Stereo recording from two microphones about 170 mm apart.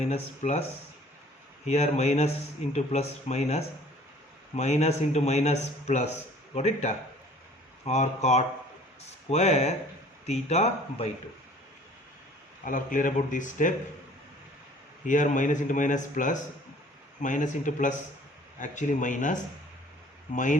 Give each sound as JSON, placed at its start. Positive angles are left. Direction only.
{"t": 0.0, "sound": "a man's voice", "side_deg": 40}
{"t": 12.6, "sound": "speech", "side_deg": 50}
{"t": 15.0, "sound": "speech", "side_deg": 50}